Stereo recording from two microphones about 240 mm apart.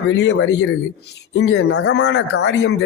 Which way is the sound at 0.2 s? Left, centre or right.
Left.